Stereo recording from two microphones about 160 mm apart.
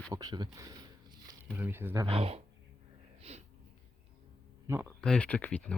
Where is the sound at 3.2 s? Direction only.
40° right (ahead or behind).